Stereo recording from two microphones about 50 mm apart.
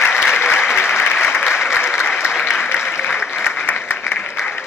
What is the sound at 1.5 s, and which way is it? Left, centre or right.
Applause, centre.